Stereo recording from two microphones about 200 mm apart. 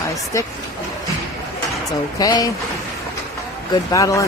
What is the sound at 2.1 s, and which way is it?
Speech, 20° left (ahead or behind).